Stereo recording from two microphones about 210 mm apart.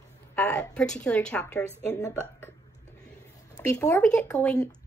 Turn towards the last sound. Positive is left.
turn(degrees=10)  # may be behind; listen again after turning